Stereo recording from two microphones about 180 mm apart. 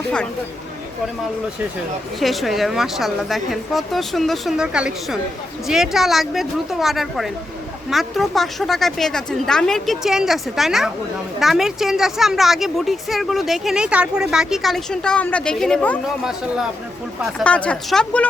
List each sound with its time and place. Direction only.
2.1 s a woman's voice: centre (ahead or behind)
17.4 s speech: 5° left (ahead or behind)